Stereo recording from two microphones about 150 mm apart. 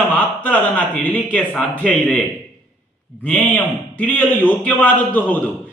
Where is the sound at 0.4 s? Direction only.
10° left (ahead or behind).